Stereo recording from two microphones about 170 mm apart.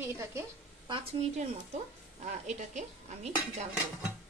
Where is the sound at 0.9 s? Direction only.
40° right (ahead or behind).